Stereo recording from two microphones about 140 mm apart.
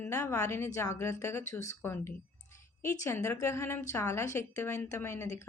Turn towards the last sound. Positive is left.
turn(degrees=20)  # may be behind; listen again after turning